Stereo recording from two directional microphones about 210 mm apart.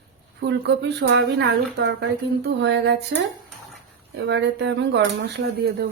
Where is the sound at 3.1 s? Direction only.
60° right (ahead or behind).